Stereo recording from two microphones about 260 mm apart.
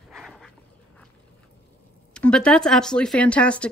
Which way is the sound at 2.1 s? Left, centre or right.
Centre.